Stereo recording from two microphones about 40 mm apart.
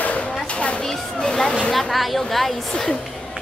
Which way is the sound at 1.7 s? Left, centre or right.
Centre.